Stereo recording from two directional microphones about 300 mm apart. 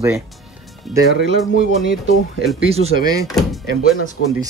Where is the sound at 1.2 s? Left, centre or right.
Right.